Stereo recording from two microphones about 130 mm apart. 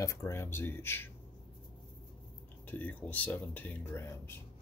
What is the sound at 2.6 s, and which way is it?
Speech, 10° left (ahead or behind).